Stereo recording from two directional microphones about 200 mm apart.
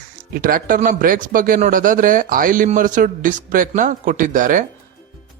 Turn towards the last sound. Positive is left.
turn(degrees=-40)  # may be behind; listen again after turning